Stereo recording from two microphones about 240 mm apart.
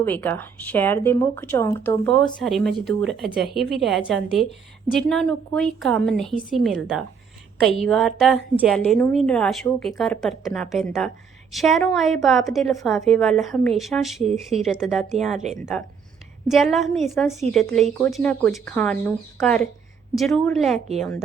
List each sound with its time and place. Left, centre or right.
0.0 s a woman's voice: centre
16.5 s a woman's voice: centre
20.7 s a woman's voice: right